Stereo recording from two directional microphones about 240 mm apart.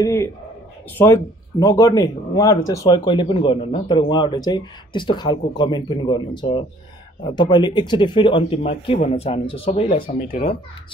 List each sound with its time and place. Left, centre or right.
0.0 s a man's voice: centre